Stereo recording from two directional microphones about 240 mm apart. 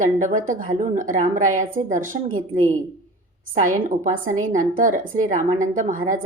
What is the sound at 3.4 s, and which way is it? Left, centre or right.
A woman's voice, right.